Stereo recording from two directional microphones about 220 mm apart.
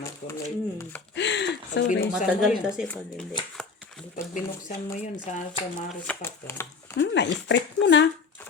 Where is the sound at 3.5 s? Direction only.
Centre (ahead or behind).